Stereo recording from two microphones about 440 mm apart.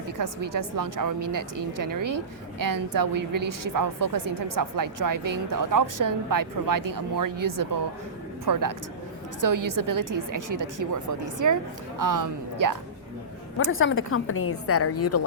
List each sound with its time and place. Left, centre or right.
0.2 s a woman's voice: right
13.7 s a woman's voice: left